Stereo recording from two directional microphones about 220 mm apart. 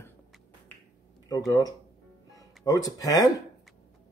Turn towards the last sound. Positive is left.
turn(degrees=15)  # may be behind; listen again after turning